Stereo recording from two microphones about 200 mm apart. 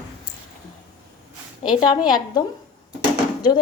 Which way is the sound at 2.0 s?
20° left (ahead or behind).